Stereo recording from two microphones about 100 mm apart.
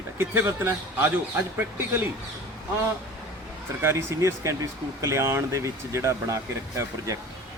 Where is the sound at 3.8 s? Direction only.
25° right (ahead or behind).